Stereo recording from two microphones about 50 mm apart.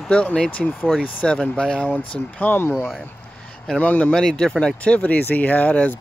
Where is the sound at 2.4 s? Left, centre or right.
Left.